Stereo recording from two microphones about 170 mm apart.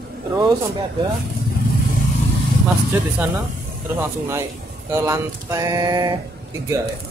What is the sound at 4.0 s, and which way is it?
Speech, 15° right (ahead or behind).